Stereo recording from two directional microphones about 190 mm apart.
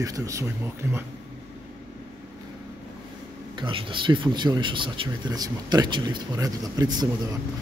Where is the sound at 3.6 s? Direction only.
25° right (ahead or behind).